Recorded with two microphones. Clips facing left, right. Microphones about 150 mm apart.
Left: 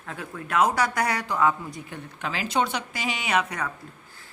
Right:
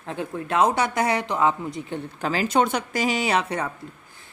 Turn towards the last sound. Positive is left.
turn(degrees=-30)  # may be behind; listen again after turning